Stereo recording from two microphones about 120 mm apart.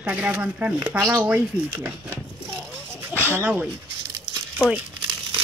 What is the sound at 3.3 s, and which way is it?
Speech, 15° right (ahead or behind).